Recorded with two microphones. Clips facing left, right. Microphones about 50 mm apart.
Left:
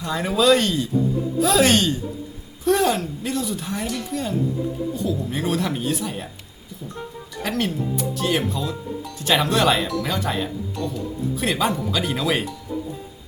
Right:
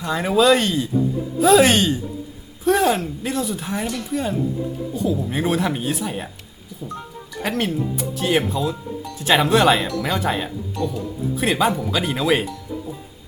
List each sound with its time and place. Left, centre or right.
0.0 s speech: centre
7.4 s speech: centre
10.8 s speech: centre